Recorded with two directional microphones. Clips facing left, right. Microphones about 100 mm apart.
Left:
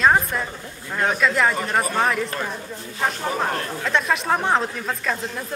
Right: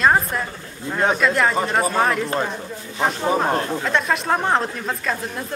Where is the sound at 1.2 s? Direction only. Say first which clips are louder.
Right 1 dB; centre (ahead or behind).